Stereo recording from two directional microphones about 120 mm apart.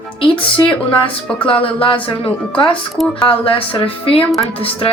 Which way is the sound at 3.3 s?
50° left (ahead or behind).